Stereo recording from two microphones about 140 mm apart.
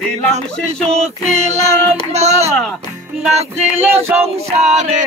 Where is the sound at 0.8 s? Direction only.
50° right (ahead or behind).